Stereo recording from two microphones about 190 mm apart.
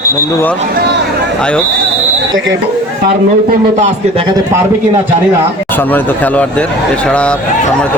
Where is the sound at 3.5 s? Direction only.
40° right (ahead or behind).